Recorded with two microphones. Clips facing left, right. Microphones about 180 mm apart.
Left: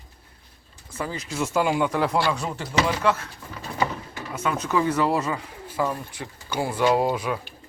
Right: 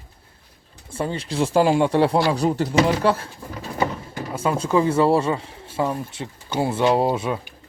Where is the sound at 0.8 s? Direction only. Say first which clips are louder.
Right 5 dB; 30° right (ahead or behind).